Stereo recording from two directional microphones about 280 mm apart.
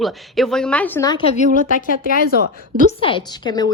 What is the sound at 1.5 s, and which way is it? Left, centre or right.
Speech, right.